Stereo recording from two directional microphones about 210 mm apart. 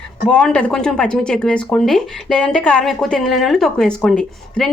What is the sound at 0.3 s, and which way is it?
Speech, 5° left (ahead or behind).